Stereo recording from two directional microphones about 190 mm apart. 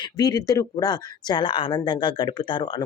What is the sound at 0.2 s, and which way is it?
Speech, 20° left (ahead or behind).